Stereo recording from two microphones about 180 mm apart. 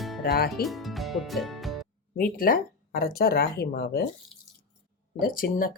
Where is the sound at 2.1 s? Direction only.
55° left (ahead or behind).